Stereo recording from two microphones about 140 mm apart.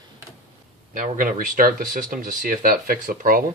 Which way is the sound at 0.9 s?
75° right (ahead or behind).